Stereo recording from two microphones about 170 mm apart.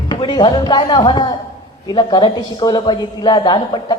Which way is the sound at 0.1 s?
25° left (ahead or behind).